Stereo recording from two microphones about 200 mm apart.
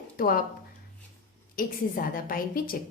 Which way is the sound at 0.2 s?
45° left (ahead or behind).